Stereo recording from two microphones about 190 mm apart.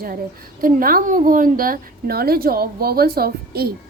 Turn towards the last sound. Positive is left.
turn(degrees=-55)  # may be behind; listen again after turning